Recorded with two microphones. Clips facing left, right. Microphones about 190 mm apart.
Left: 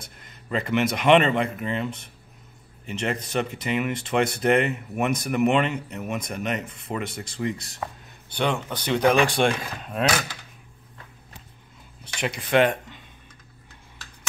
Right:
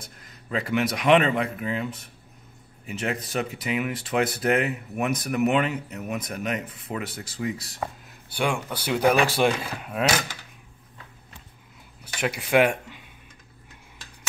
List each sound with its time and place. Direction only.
0.0 s speech: centre (ahead or behind)
12.0 s speech: 5° right (ahead or behind)